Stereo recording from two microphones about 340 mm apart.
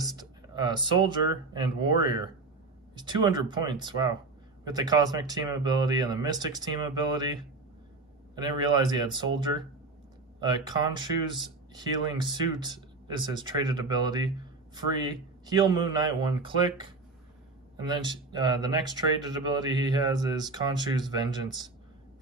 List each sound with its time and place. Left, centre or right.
0.0 s speech: centre
8.4 s speech: centre